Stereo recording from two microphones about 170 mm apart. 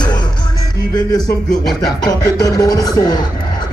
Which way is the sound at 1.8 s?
20° left (ahead or behind).